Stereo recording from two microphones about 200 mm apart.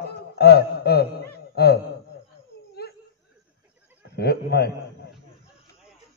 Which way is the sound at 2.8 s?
55° left (ahead or behind).